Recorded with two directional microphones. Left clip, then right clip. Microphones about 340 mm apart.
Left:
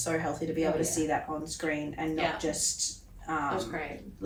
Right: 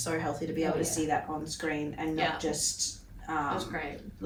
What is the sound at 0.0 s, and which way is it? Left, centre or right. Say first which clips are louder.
Speech: left 1 dB; centre.